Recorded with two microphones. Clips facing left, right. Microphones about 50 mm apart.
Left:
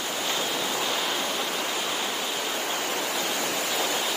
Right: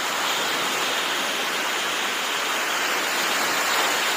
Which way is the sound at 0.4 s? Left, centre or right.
Right.